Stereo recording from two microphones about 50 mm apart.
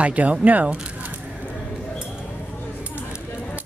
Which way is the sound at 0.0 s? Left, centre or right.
Right.